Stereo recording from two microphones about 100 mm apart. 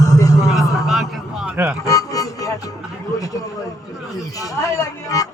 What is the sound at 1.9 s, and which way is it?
Music, 35° left (ahead or behind).